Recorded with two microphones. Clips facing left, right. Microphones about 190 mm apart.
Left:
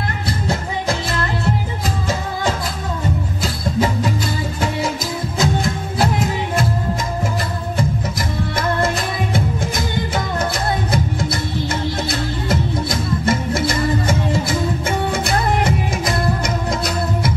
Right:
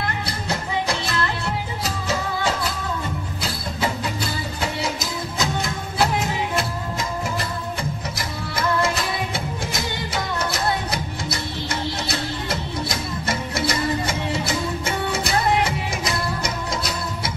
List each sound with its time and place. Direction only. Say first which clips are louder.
5.4 s music: left 6 dB; 50° left (ahead or behind)
10.1 s music: left 1 dB; 50° left (ahead or behind)
13.2 s music: left 5 dB; 50° left (ahead or behind)